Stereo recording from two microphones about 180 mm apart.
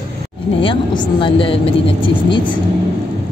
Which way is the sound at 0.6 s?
25° left (ahead or behind).